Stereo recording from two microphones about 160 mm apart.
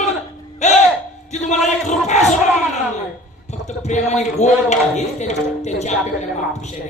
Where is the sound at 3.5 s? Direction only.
45° left (ahead or behind).